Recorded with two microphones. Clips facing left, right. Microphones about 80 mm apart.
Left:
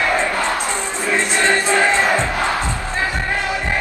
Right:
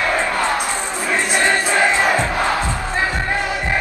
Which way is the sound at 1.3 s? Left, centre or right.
Centre.